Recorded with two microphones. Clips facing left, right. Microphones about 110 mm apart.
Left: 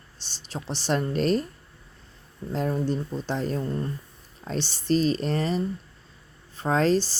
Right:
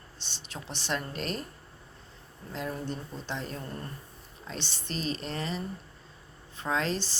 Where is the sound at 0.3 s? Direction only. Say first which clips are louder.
Left 8 dB; 35° left (ahead or behind).